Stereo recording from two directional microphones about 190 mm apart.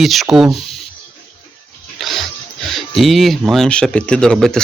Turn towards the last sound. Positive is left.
turn(degrees=5)  # may be behind; listen again after turning